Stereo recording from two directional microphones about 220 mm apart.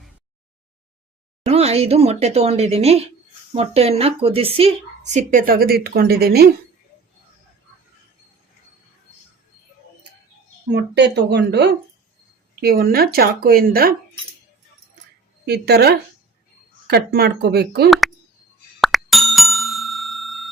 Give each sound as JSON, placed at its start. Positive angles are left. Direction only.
{"t": 1.5, "sound": "a woman's voice", "side_deg": -30}
{"t": 10.7, "sound": "speech", "side_deg": -50}
{"t": 15.4, "sound": "speech", "side_deg": -45}
{"t": 18.8, "sound": "bicycle bell", "side_deg": 0}